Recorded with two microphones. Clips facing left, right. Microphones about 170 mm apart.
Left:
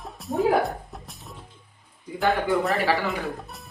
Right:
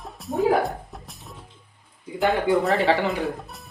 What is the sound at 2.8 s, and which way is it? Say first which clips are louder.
Speech: right 3 dB; 20° right (ahead or behind).